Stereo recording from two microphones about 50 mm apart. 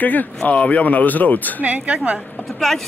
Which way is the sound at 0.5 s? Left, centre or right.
Left.